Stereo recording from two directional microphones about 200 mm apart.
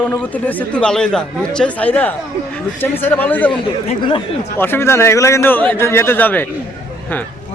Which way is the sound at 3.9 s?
25° left (ahead or behind).